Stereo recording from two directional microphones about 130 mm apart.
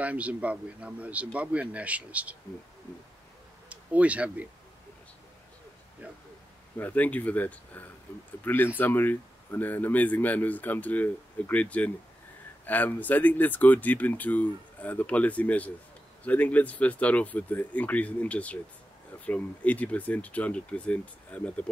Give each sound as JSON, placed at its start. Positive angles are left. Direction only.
{"t": 0.0, "sound": "speech", "side_deg": -10}
{"t": 3.6, "sound": "speech", "side_deg": -10}
{"t": 6.8, "sound": "speech", "side_deg": 10}